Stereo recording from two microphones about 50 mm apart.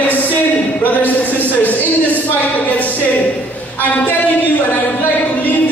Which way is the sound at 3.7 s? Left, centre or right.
Left.